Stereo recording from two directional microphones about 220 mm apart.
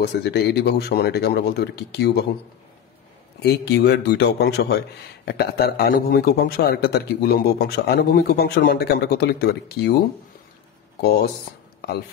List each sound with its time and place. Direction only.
0.0 s a man's voice: 50° left (ahead or behind)
3.4 s a man's voice: 50° left (ahead or behind)